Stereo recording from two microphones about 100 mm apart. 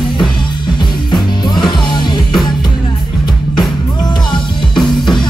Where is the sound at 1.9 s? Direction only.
45° left (ahead or behind).